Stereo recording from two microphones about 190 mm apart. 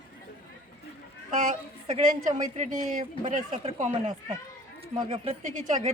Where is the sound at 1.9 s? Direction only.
40° right (ahead or behind).